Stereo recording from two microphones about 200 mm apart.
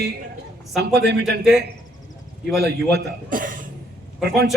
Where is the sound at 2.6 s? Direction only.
55° right (ahead or behind).